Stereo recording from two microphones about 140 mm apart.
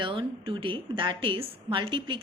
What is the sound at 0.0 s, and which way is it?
A woman's voice, 35° right (ahead or behind).